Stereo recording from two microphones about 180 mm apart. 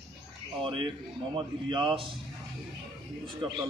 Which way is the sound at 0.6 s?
30° right (ahead or behind).